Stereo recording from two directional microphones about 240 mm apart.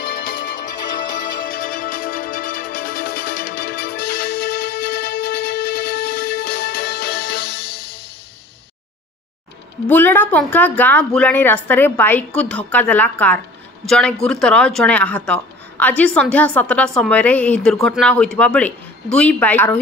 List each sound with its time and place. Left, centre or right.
1.4 s music: left
9.8 s a woman's voice: centre